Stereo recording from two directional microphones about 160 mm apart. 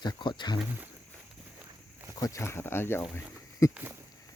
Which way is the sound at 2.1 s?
20° left (ahead or behind).